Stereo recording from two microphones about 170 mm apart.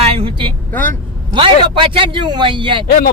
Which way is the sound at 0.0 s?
35° right (ahead or behind).